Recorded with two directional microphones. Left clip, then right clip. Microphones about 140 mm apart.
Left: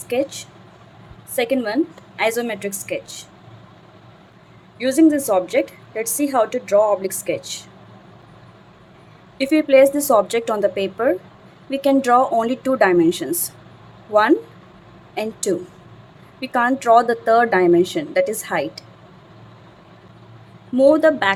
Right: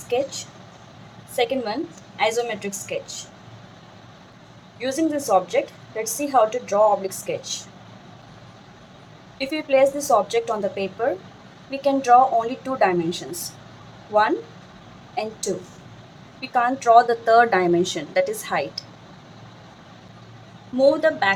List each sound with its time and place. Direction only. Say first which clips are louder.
0.1 s a woman's voice: left 2 dB; 50° left (ahead or behind)
4.8 s a woman's voice: left 8 dB; 50° left (ahead or behind)
9.4 s a woman's voice: left 5 dB; 55° left (ahead or behind)
17.2 s speech: left 2 dB; 25° left (ahead or behind)
20.7 s a woman's voice: left 4 dB; 40° left (ahead or behind)